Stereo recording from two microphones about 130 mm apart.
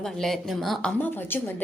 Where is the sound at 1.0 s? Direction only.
15° left (ahead or behind).